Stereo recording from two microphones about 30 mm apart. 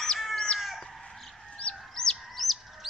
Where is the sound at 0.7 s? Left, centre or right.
Centre.